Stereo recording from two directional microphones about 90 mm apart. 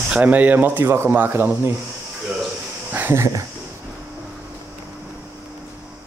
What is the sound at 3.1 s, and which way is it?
Speech, 35° right (ahead or behind).